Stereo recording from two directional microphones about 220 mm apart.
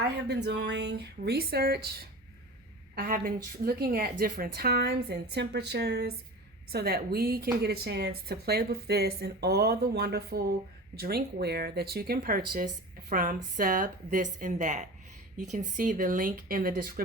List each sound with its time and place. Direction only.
0.0 s a woman's voice: 50° right (ahead or behind)